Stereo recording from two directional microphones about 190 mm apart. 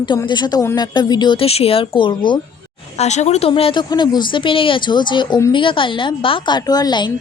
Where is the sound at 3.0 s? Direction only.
35° left (ahead or behind).